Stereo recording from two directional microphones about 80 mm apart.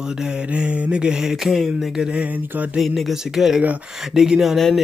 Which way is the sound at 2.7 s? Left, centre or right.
Centre.